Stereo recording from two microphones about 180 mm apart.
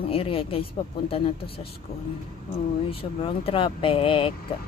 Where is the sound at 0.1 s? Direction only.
30° left (ahead or behind).